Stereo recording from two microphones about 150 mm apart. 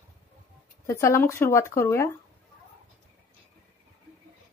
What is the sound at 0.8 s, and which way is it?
Speech, 20° left (ahead or behind).